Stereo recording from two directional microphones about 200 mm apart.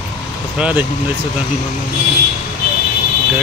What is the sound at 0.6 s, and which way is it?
Speech, 5° right (ahead or behind).